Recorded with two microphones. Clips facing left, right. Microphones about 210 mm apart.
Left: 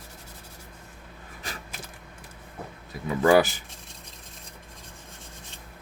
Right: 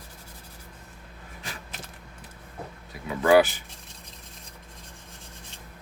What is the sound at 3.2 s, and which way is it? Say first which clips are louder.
Speech: right 1 dB; 40° left (ahead or behind).